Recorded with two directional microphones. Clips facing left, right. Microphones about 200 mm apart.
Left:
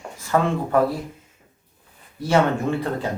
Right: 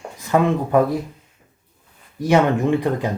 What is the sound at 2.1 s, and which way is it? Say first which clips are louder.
Speech: right 3 dB; 15° right (ahead or behind).